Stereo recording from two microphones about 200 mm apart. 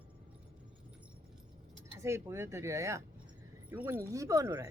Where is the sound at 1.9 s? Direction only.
15° right (ahead or behind).